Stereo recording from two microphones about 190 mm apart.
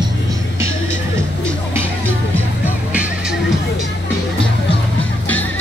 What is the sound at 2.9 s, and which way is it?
Music, 5° right (ahead or behind).